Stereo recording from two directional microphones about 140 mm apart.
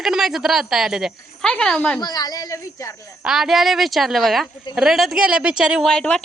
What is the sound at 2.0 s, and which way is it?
Speech, 30° left (ahead or behind).